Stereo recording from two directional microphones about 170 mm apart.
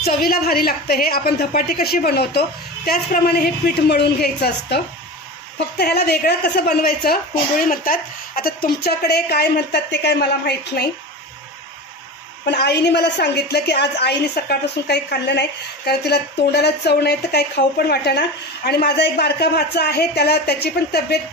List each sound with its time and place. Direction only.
0.0 s a woman's voice: 65° left (ahead or behind)
12.4 s a woman's voice: 75° left (ahead or behind)